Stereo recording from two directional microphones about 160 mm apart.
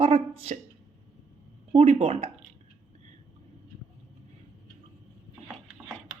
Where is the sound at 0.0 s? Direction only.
40° right (ahead or behind).